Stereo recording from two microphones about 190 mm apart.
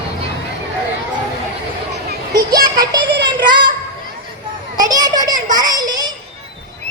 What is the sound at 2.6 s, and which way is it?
Child singing, 20° right (ahead or behind).